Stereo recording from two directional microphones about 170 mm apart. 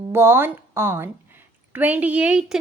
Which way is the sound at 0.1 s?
15° right (ahead or behind).